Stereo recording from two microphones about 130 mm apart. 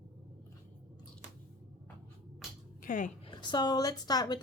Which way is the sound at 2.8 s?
90° left.